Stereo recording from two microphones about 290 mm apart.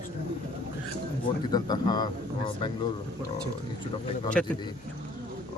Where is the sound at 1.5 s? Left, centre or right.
Centre.